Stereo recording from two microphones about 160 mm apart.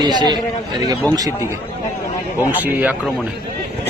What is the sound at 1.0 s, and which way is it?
Speech, 10° left (ahead or behind).